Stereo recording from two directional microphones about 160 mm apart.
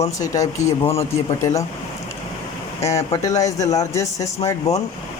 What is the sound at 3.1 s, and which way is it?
Speech, 20° left (ahead or behind).